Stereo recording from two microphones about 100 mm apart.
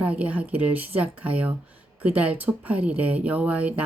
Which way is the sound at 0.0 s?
15° right (ahead or behind).